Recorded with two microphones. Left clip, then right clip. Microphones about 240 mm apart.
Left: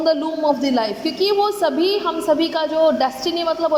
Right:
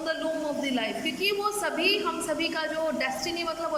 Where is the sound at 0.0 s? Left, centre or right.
Centre.